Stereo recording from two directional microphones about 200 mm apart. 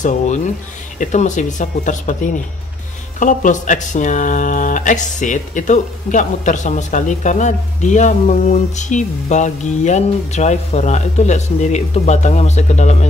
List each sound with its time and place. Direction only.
0.9 s speech: 40° left (ahead or behind)